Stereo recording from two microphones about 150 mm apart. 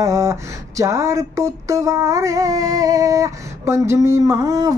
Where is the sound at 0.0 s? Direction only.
20° right (ahead or behind).